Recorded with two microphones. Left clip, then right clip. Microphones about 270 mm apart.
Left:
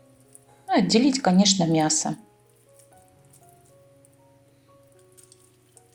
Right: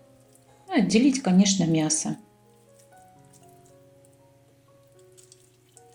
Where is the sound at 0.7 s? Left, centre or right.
Left.